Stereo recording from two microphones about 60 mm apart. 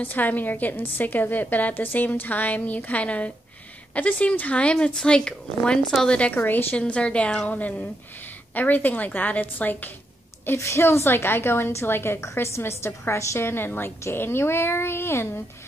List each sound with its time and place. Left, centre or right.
0.0 s a woman's voice: left
6.4 s speech: left
6.7 s a woman's voice: centre
10.4 s a woman's voice: left